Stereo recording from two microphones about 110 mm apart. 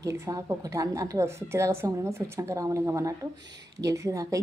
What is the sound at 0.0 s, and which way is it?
A woman's voice, 30° right (ahead or behind).